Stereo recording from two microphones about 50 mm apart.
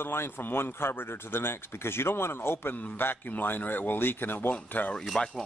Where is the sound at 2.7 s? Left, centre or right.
Left.